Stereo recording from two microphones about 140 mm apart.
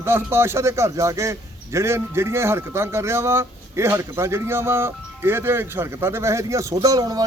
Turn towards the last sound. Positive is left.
turn(degrees=-25)  # may be behind; listen again after turning